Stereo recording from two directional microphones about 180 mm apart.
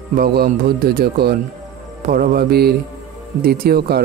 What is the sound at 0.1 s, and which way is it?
Speech, 60° right (ahead or behind).